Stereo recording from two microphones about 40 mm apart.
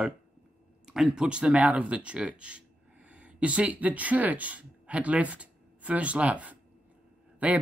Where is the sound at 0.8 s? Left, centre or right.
Centre.